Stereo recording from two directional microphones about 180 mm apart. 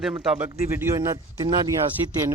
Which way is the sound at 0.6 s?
15° right (ahead or behind).